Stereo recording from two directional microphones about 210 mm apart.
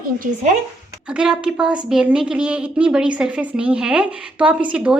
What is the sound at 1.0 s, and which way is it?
Speech, 5° right (ahead or behind).